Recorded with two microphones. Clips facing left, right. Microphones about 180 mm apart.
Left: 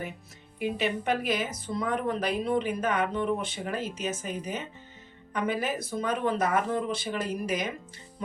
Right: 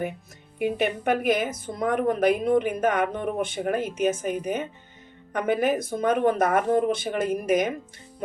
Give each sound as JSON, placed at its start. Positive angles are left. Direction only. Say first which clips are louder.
{"t": 0.6, "sound": "speech", "louder": "right 4 dB", "side_deg": -55}